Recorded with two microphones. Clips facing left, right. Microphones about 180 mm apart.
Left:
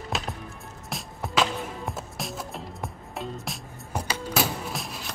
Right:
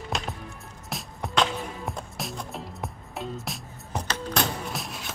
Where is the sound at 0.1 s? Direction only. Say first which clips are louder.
Left 1 dB; centre (ahead or behind).